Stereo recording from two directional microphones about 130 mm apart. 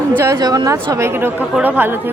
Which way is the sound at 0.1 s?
15° right (ahead or behind).